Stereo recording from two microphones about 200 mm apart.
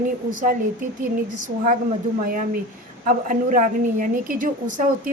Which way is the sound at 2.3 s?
45° right (ahead or behind).